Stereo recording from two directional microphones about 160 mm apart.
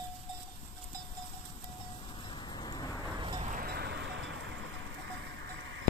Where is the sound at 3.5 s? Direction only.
70° right (ahead or behind); by 5.5 s 90° right.